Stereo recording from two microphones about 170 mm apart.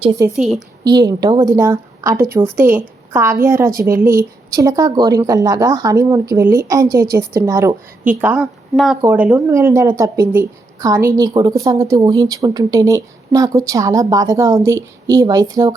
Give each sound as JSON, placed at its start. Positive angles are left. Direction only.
{"t": 0.3, "sound": "a woman's voice", "side_deg": 0}
{"t": 0.9, "sound": "a woman's voice", "side_deg": -25}
{"t": 8.7, "sound": "a woman's voice", "side_deg": 0}